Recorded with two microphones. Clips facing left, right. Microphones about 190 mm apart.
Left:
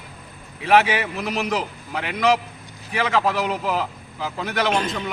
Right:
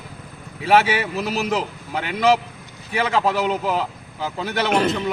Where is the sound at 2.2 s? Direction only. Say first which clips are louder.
Right 2 dB; centre (ahead or behind).